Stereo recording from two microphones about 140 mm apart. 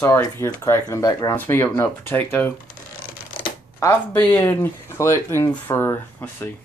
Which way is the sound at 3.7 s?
20° left (ahead or behind).